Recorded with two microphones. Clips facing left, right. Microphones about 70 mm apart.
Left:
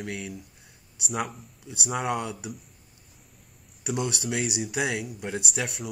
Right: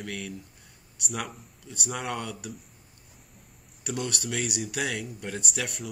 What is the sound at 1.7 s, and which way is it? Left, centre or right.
Speech, centre.